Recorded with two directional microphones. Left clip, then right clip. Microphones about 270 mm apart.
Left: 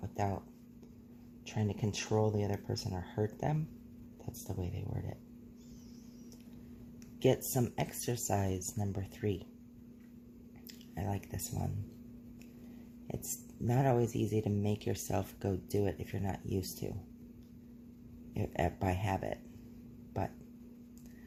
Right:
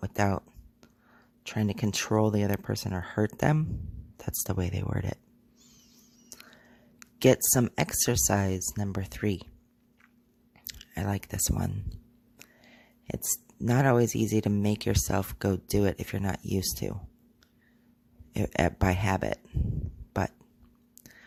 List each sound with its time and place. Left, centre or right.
0.0 s a sound: right
1.5 s speech: right
7.2 s speech: right
10.7 s speech: right
13.1 s speech: right
18.3 s speech: right